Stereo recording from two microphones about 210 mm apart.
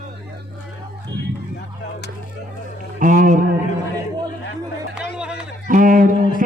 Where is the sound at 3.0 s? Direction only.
40° right (ahead or behind).